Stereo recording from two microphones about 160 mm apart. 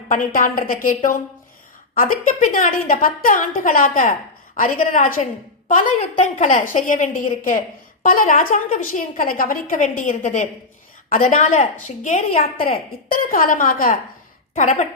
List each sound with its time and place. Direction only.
0.1 s a woman's voice: 60° left (ahead or behind)
13.1 s a woman's voice: 60° left (ahead or behind)
14.5 s a woman's voice: 45° left (ahead or behind)